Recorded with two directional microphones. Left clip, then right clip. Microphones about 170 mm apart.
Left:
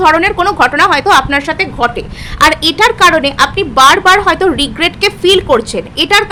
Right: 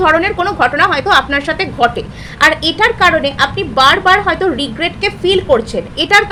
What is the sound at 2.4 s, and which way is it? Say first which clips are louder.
A woman's voice: left 2 dB; 25° left (ahead or behind).